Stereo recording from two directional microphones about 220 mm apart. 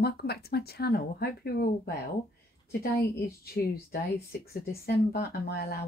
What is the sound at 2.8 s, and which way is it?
Speech, 45° left (ahead or behind).